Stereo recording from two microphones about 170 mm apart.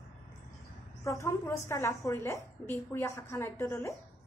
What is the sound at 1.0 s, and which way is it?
A woman's voice, 15° left (ahead or behind).